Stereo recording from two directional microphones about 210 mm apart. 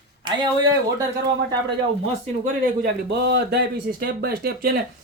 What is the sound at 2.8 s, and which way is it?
Speech, 55° right (ahead or behind).